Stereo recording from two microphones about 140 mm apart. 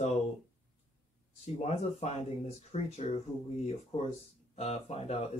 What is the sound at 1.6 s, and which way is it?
Speech, 50° left (ahead or behind).